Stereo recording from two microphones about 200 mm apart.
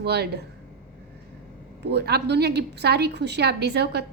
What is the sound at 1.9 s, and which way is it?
A woman's voice, 55° right (ahead or behind).